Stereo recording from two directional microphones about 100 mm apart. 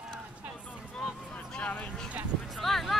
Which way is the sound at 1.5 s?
15° left (ahead or behind).